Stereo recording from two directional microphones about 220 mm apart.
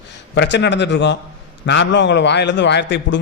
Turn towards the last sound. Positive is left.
turn(degrees=55)  # may be behind; listen again after turning